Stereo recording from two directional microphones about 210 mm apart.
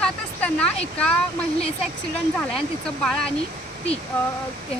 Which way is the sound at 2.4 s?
Centre (ahead or behind).